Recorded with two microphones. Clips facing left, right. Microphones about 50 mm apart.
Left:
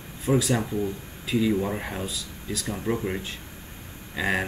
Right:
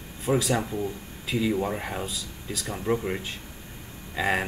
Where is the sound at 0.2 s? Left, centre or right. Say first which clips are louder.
Left 1 dB; centre.